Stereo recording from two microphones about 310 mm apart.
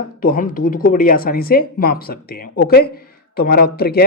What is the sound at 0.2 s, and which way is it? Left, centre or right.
Speech, left.